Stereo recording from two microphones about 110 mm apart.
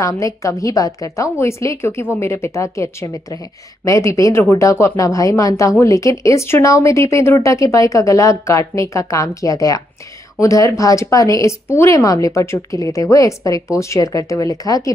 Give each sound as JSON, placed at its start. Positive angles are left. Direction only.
{"t": 0.0, "sound": "speech", "side_deg": 30}